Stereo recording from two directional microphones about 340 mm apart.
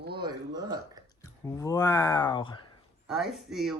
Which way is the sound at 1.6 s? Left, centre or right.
Centre.